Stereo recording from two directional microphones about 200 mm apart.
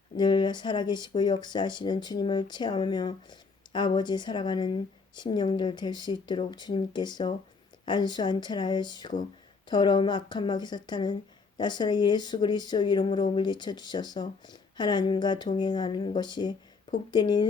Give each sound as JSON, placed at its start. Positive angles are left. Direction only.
{"t": 0.2, "sound": "speech", "side_deg": 20}